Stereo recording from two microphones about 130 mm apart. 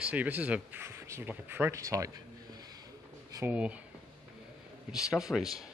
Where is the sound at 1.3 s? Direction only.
15° right (ahead or behind).